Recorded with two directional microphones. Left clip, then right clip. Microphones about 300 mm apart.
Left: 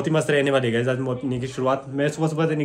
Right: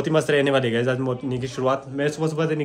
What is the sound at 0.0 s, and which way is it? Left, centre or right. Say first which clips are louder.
Speech: right 1 dB; centre.